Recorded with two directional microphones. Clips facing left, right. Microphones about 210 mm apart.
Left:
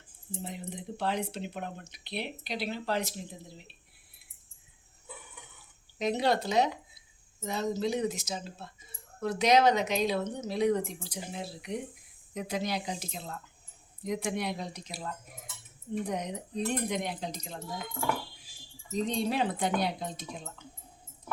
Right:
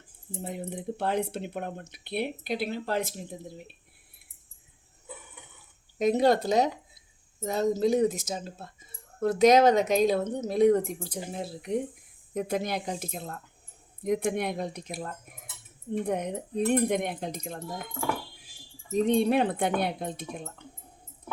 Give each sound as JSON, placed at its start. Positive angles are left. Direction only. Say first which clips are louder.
{"t": 0.4, "sound": "speech", "louder": "right 6 dB", "side_deg": -55}
{"t": 6.0, "sound": "speech", "louder": "right 6 dB", "side_deg": -50}
{"t": 18.9, "sound": "speech", "louder": "right 7 dB", "side_deg": -55}